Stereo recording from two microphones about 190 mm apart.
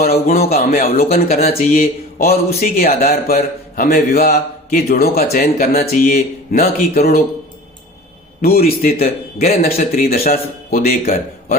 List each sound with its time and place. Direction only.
0.0 s speech: 50° left (ahead or behind)
8.4 s speech: 50° left (ahead or behind)
10.8 s speech: 40° left (ahead or behind)